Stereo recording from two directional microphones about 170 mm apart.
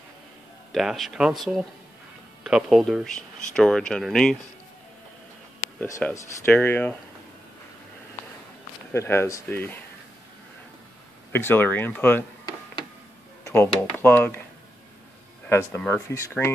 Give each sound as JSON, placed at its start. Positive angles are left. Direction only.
{"t": 0.7, "sound": "speech", "side_deg": 0}
{"t": 5.8, "sound": "speech", "side_deg": 15}
{"t": 8.9, "sound": "speech", "side_deg": 15}
{"t": 11.3, "sound": "speech", "side_deg": 10}
{"t": 13.4, "sound": "speech", "side_deg": 15}
{"t": 15.5, "sound": "speech", "side_deg": 15}